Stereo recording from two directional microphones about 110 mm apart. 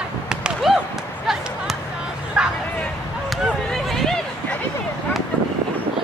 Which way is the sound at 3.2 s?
Centre (ahead or behind).